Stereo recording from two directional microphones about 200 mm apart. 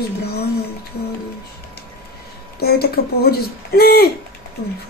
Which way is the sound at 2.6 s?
50° left (ahead or behind).